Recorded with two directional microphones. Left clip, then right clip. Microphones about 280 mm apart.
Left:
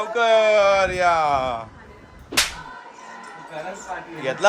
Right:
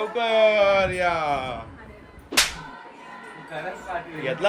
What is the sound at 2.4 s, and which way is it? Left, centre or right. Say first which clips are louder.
Whip: even; centre.